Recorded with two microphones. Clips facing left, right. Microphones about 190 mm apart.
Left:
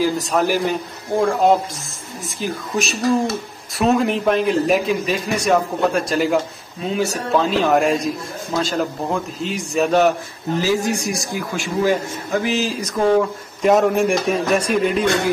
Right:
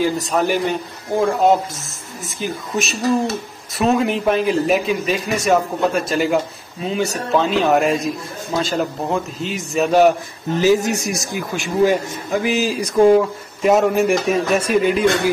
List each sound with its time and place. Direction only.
0.0 s a man's voice: centre (ahead or behind)
10.6 s speech: 20° right (ahead or behind); by 15.0 s centre (ahead or behind)